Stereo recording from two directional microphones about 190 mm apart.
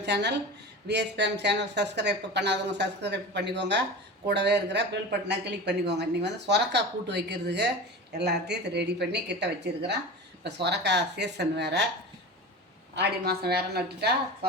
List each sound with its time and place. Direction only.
0.0 s a woman's voice: 65° right (ahead or behind)
13.0 s speech: 55° right (ahead or behind)